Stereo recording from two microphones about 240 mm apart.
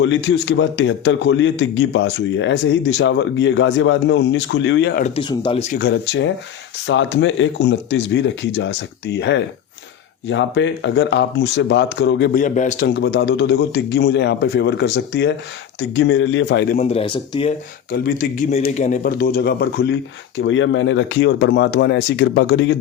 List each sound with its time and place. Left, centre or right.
0.0 s a man's voice: left
5.0 s speech: left
5.7 s a man's voice: left
12.4 s a man's voice: left
12.9 s a man's voice: left
16.7 s speech: left
17.9 s a man's voice: left